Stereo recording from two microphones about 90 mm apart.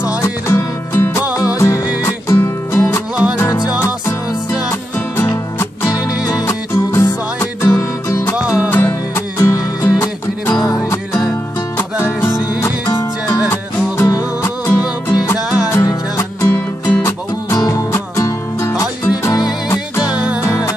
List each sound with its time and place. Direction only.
0.2 s music: 30° left (ahead or behind)
4.6 s music: 30° left (ahead or behind)
6.7 s music: 25° left (ahead or behind)
15.3 s music: 10° right (ahead or behind)
15.7 s music: 35° left (ahead or behind)
17.9 s music: 35° left (ahead or behind)
20.4 s music: 35° left (ahead or behind)